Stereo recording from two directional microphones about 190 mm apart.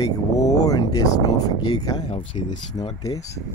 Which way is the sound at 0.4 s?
20° left (ahead or behind).